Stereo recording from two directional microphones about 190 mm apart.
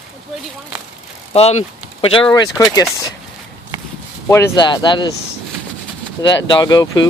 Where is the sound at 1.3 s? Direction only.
35° left (ahead or behind).